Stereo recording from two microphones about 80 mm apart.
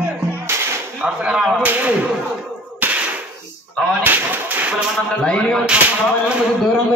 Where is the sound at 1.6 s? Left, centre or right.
Right.